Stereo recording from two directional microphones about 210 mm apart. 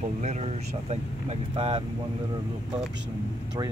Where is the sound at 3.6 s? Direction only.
20° right (ahead or behind).